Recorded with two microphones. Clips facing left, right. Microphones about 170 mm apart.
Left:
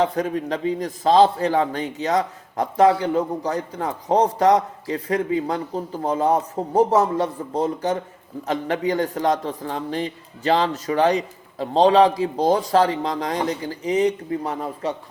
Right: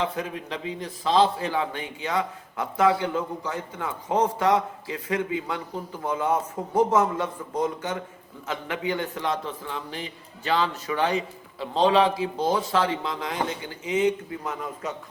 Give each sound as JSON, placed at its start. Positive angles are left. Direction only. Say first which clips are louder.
{"t": 0.0, "sound": "a man's voice", "louder": "left 7 dB", "side_deg": 40}